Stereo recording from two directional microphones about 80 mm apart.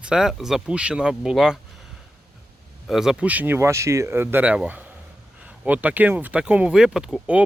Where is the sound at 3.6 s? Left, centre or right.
Right.